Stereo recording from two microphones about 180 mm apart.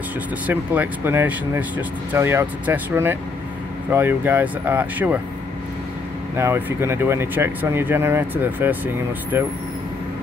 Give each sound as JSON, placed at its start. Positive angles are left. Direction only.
{"t": 0.5, "sound": "speech", "side_deg": -10}
{"t": 6.3, "sound": "speech", "side_deg": -15}